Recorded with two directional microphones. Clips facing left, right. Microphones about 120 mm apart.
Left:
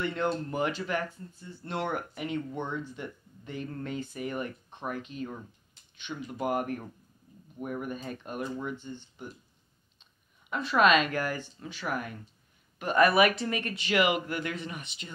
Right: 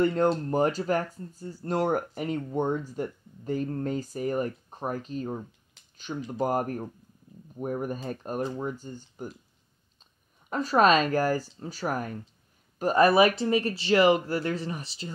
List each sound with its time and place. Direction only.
0.0 s speech: 40° right (ahead or behind)
10.5 s speech: 40° right (ahead or behind)